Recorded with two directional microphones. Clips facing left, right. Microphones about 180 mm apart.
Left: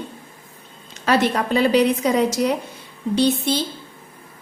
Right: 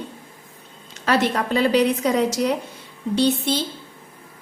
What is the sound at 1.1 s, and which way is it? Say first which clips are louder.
A woman's voice: left 2 dB; 15° left (ahead or behind).